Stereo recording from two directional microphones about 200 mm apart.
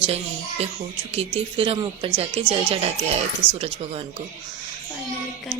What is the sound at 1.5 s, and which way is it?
A woman's voice, 25° right (ahead or behind).